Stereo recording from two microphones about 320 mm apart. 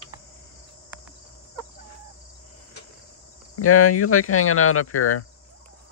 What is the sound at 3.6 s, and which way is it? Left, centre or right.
Speech, left.